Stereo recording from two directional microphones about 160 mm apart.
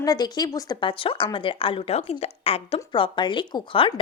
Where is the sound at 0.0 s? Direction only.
25° left (ahead or behind).